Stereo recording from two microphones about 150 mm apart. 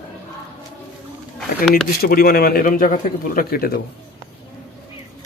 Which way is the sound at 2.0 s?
90° left.